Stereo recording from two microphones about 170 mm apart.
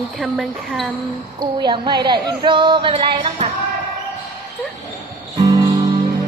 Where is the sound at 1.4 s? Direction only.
25° right (ahead or behind).